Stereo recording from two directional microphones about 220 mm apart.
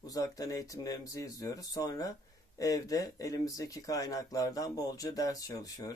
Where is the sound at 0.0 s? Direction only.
15° left (ahead or behind).